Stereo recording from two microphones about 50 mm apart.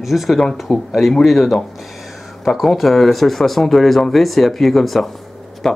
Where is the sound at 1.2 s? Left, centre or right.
Centre.